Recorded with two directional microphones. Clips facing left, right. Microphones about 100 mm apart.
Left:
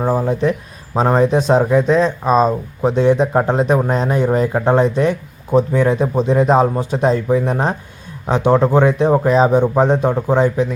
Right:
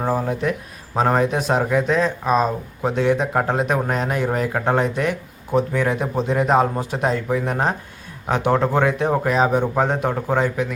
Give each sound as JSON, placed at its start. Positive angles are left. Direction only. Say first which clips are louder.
{"t": 0.2, "sound": "speech", "louder": "left 5 dB", "side_deg": 30}